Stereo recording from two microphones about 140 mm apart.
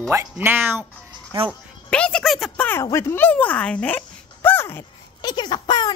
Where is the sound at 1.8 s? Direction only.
10° left (ahead or behind).